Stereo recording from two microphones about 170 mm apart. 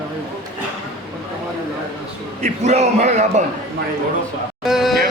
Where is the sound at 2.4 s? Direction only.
40° right (ahead or behind).